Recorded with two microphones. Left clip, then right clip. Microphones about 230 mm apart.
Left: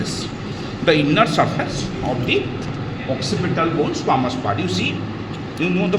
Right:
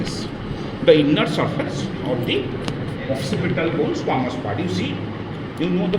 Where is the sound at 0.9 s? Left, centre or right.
Left.